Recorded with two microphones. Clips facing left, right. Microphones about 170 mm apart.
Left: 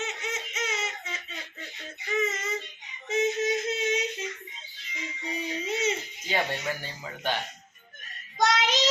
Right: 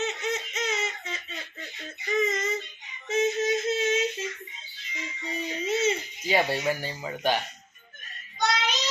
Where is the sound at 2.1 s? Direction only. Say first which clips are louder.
Right 3 dB; 5° left (ahead or behind).